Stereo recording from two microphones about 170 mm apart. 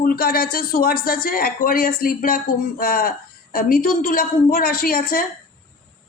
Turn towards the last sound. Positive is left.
turn(degrees=55)  # may be behind; listen again after turning